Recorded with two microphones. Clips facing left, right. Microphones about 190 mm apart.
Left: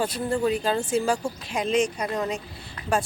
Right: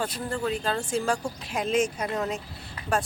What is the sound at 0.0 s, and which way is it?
Speech, 10° left (ahead or behind).